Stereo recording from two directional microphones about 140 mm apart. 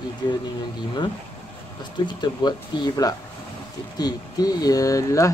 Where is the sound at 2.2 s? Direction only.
30° left (ahead or behind).